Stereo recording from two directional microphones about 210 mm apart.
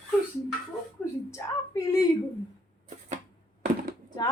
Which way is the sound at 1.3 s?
15° left (ahead or behind).